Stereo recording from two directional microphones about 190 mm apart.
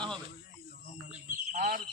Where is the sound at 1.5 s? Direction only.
50° right (ahead or behind).